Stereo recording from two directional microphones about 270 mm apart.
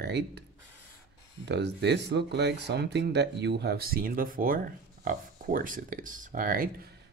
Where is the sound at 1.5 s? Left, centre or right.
Right.